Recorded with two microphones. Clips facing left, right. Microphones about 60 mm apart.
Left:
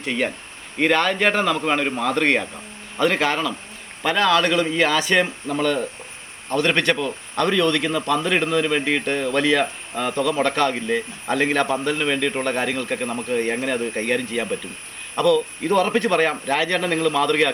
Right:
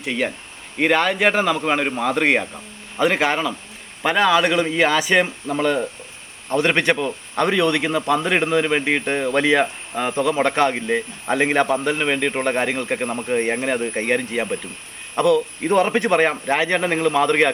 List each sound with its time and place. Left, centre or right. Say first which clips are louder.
0.0 s speech: even; centre